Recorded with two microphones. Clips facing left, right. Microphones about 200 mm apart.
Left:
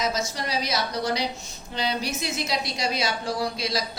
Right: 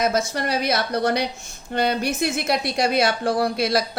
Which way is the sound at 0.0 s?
55° right (ahead or behind).